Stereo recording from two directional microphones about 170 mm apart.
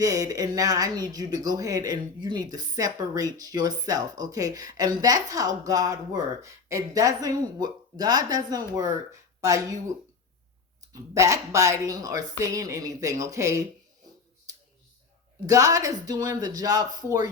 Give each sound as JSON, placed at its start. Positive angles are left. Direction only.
{"t": 0.0, "sound": "speech", "side_deg": -20}
{"t": 11.1, "sound": "speech", "side_deg": -20}
{"t": 15.4, "sound": "speech", "side_deg": -20}